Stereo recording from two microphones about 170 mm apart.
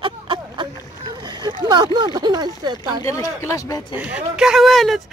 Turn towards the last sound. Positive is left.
turn(degrees=0)  # may be behind; listen again after turning